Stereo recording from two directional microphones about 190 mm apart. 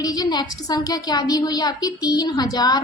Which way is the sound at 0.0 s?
20° left (ahead or behind).